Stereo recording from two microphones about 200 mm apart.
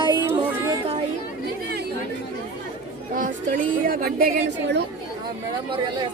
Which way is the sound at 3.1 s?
40° right (ahead or behind).